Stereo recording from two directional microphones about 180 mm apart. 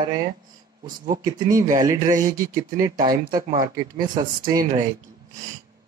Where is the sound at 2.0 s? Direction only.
45° right (ahead or behind).